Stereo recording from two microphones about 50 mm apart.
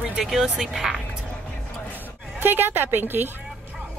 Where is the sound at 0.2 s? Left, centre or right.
Centre.